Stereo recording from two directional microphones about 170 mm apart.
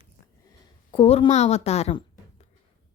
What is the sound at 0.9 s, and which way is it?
A woman's voice, 35° left (ahead or behind).